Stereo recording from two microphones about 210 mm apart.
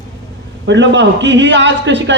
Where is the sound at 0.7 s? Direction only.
60° right (ahead or behind).